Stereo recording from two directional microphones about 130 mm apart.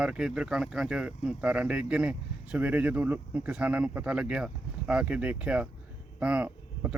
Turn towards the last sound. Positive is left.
turn(degrees=-10)  # may be behind; listen again after turning